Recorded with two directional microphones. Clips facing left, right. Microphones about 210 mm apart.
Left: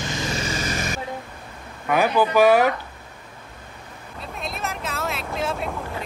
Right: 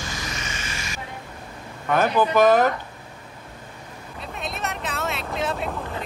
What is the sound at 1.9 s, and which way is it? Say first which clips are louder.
Speech: left 1 dB; 10° left (ahead or behind).